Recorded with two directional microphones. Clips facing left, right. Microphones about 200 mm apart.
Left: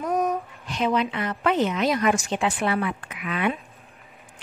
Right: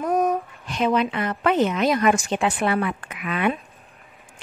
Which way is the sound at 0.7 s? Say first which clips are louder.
Right 2 dB; 50° right (ahead or behind).